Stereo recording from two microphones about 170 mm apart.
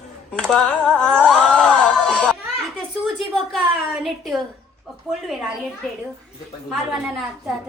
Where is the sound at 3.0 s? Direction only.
Centre (ahead or behind).